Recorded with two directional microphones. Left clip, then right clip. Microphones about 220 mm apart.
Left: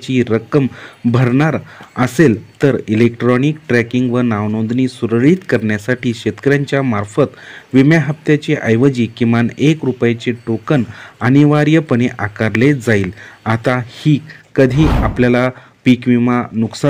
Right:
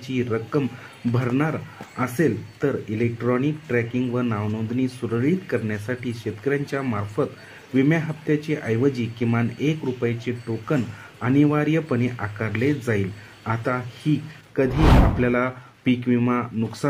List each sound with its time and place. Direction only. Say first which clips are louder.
0.0 s speech: left 10 dB; 40° left (ahead or behind)